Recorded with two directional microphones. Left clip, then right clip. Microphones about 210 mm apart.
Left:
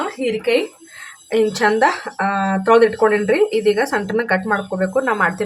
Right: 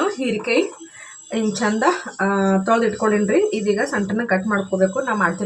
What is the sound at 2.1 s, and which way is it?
Speech, 65° left (ahead or behind).